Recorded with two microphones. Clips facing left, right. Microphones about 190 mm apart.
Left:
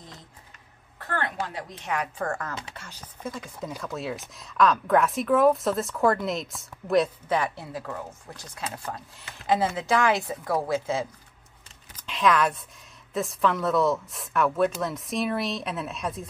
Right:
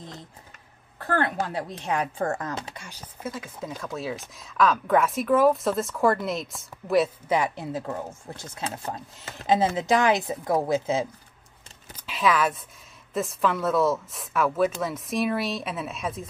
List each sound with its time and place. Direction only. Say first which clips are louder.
0.9 s a woman's voice: right 5 dB; 40° right (ahead or behind); by 2.5 s 20° right (ahead or behind)
2.7 s a woman's voice: right 1 dB; 10° right (ahead or behind)
7.2 s speech: right 2 dB; 15° right (ahead or behind)
11.9 s a sound: left 1 dB; 5° right (ahead or behind)
13.1 s a woman's voice: even; centre (ahead or behind)